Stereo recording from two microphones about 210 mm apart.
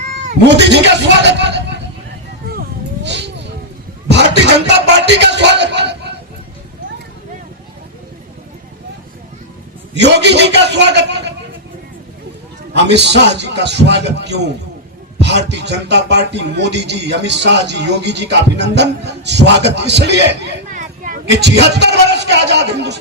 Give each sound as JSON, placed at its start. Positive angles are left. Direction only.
{"t": 0.4, "sound": "speech", "side_deg": -55}
{"t": 2.5, "sound": "a sound", "side_deg": -50}
{"t": 9.9, "sound": "speech", "side_deg": -55}
{"t": 12.7, "sound": "speech", "side_deg": -55}
{"t": 20.7, "sound": "a man's voice", "side_deg": -40}